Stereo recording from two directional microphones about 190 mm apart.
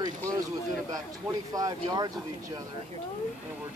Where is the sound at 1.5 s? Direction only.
20° right (ahead or behind).